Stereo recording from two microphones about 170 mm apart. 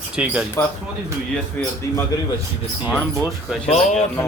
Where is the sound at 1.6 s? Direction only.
10° left (ahead or behind).